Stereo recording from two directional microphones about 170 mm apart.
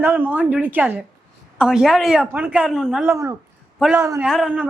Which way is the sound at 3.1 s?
15° right (ahead or behind).